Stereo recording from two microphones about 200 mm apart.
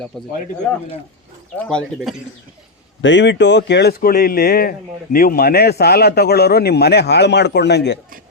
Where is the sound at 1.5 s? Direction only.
5° left (ahead or behind).